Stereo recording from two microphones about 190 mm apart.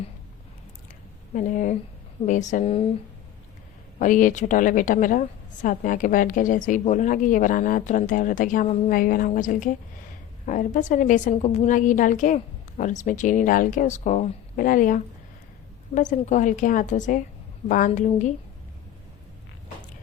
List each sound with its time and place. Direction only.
1.3 s a woman's voice: 45° left (ahead or behind)
4.0 s a woman's voice: 45° left (ahead or behind)